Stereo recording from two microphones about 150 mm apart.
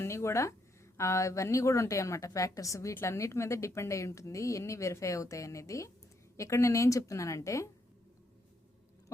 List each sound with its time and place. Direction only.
0.0 s a woman's voice: 15° left (ahead or behind)